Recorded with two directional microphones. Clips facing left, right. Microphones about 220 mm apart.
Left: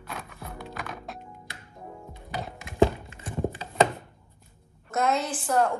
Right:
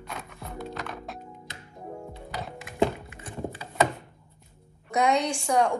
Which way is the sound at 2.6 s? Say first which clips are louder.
Left 3 dB; 25° left (ahead or behind).